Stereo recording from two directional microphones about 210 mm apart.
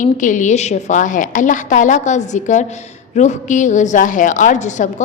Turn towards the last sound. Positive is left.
turn(degrees=35)  # may be behind; listen again after turning